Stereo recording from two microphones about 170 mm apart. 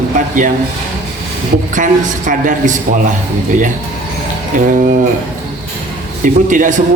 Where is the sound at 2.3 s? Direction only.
50° right (ahead or behind).